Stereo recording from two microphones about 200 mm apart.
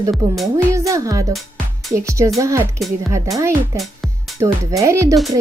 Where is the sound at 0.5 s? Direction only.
15° right (ahead or behind).